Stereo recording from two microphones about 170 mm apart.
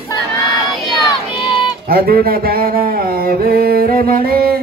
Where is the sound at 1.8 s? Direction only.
60° right (ahead or behind).